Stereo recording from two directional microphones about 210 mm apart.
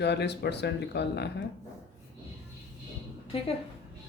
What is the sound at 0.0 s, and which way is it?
Speech, 55° left (ahead or behind).